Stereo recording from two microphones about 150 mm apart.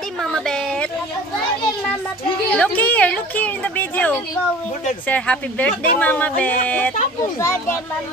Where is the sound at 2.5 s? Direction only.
10° left (ahead or behind).